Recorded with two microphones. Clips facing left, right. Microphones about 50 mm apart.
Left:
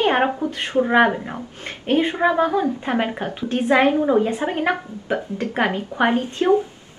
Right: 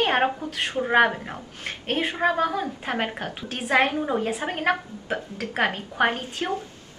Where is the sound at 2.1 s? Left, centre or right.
Centre.